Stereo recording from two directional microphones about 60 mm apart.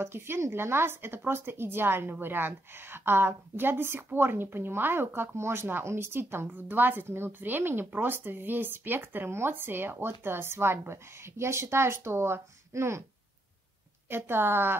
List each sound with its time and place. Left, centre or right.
0.0 s a woman's voice: right
14.0 s a woman's voice: right